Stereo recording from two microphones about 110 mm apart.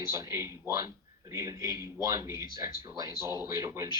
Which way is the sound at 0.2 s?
25° right (ahead or behind).